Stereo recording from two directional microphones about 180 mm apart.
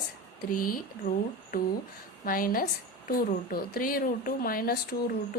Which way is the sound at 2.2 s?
50° left (ahead or behind).